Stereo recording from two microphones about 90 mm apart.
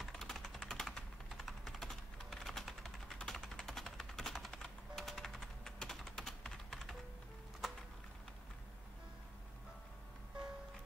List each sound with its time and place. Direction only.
0.0 s typing: 5° left (ahead or behind)
3.2 s music: 5° left (ahead or behind)
7.6 s a sound: centre (ahead or behind)